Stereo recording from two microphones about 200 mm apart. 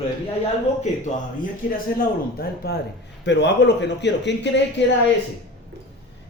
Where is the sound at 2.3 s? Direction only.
50° left (ahead or behind).